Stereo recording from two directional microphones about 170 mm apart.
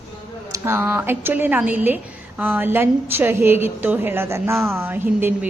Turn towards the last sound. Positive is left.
turn(degrees=-10)  # may be behind; listen again after turning